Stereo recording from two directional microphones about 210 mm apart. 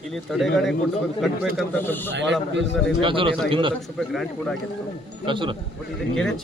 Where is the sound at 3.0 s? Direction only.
25° right (ahead or behind).